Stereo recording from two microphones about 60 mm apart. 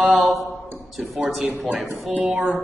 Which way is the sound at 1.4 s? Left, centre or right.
Right.